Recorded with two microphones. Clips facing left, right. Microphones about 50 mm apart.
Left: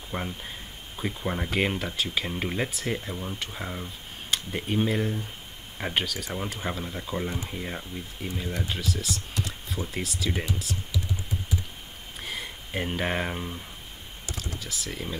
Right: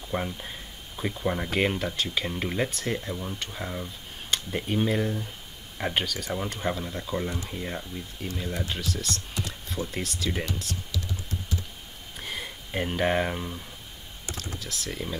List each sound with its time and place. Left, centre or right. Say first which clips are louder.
0.1 s speech: right 3 dB; centre
12.2 s a sound: even; centre
14.6 s speech: right 1 dB; centre